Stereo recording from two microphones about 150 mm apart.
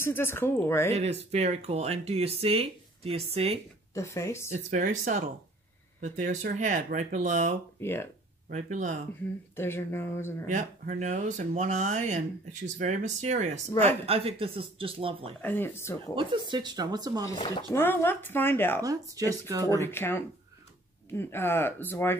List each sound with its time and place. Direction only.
0.0 s speech: 15° left (ahead or behind)
0.9 s speech: 45° right (ahead or behind)
3.9 s speech: 20° left (ahead or behind)
4.6 s speech: 55° right (ahead or behind)
7.8 s speech: 15° left (ahead or behind)
8.5 s speech: 55° right (ahead or behind)
9.6 s speech: 15° left (ahead or behind)
10.4 s speech: 55° right (ahead or behind); by 15.3 s 40° right (ahead or behind)
15.4 s speech: 15° left (ahead or behind)
16.2 s speech: 30° right (ahead or behind)
17.7 s speech: 15° left (ahead or behind)
18.8 s speech: 25° right (ahead or behind)
19.8 s speech: 15° left (ahead or behind)